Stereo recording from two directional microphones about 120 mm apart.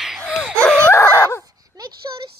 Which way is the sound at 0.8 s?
20° left (ahead or behind).